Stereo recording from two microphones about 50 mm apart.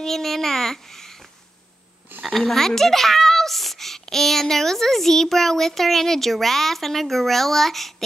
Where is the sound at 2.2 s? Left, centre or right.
Centre.